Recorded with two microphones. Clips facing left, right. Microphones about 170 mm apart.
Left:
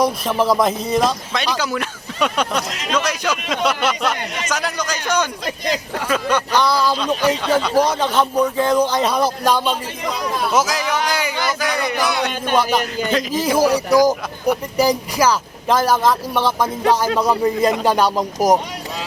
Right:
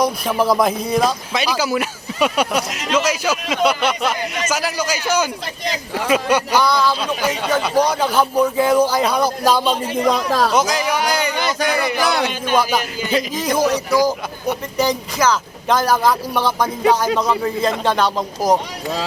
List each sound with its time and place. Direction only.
0.0 s speech: centre (ahead or behind)
6.7 s a man's voice: 10° left (ahead or behind)
7.0 s speech: 5° right (ahead or behind)
10.1 s speech: 90° right
10.5 s a man's voice: centre (ahead or behind)